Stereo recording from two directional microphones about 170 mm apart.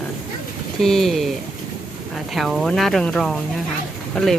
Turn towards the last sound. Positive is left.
turn(degrees=0)  # may be behind; listen again after turning